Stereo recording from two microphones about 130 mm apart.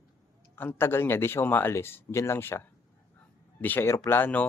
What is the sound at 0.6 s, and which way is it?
Speech, 15° left (ahead or behind).